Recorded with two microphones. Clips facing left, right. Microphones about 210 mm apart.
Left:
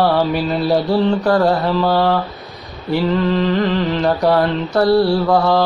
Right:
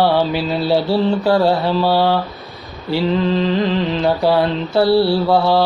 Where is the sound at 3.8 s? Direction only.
5° right (ahead or behind).